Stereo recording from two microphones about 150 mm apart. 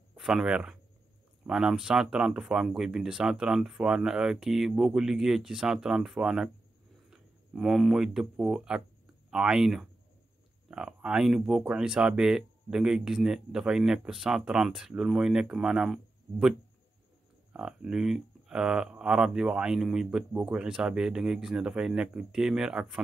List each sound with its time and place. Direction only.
0.1 s speech: 5° right (ahead or behind)